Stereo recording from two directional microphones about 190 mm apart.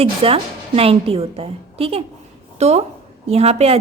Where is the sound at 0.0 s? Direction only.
30° right (ahead or behind).